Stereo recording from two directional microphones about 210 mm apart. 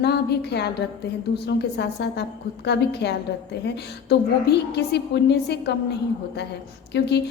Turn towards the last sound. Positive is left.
turn(degrees=55)  # may be behind; listen again after turning